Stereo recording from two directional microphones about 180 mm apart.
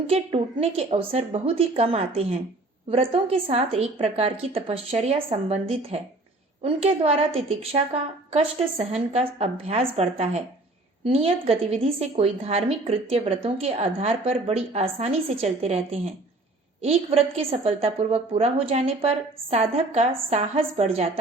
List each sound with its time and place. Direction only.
0.1 s a woman's voice: 35° right (ahead or behind)
8.8 s a woman's voice: 35° right (ahead or behind)